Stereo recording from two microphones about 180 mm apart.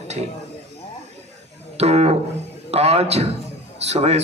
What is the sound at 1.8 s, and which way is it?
A man's voice, 35° right (ahead or behind).